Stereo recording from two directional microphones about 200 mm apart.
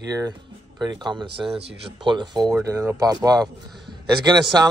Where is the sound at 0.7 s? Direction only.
20° right (ahead or behind).